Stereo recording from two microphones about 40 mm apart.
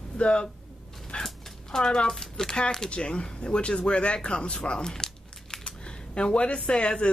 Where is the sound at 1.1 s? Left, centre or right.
Left.